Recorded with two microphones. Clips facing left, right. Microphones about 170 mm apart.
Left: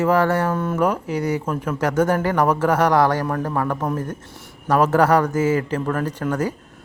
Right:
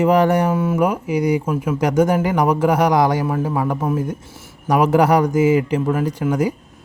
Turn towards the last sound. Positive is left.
turn(degrees=-10)  # may be behind; listen again after turning